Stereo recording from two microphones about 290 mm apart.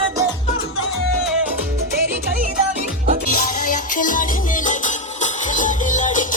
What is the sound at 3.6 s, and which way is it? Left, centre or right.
Music, left.